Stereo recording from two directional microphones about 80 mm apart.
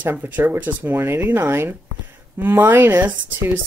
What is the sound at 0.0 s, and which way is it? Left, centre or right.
A woman's voice, right.